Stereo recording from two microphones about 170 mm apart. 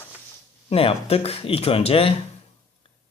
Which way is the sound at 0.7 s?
35° left (ahead or behind).